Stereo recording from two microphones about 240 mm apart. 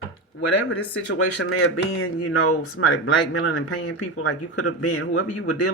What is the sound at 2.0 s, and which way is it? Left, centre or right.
Speech, left.